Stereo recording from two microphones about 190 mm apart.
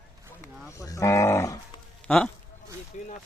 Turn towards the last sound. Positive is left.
turn(degrees=40)  # may be behind; listen again after turning